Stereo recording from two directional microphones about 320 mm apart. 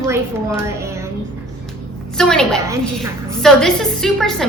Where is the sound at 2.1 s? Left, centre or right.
Centre.